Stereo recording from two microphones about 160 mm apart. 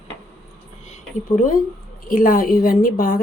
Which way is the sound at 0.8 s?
50° left (ahead or behind).